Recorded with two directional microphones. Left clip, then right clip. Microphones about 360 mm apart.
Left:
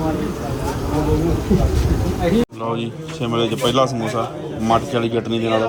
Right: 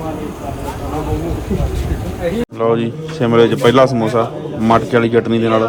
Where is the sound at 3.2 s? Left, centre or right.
Right.